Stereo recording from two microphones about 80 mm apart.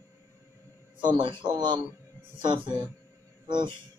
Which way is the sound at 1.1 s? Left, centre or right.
Right.